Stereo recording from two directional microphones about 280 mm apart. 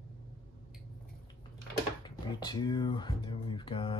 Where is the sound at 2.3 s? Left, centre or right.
Centre.